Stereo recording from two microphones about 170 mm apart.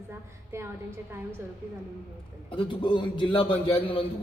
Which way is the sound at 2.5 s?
30° left (ahead or behind).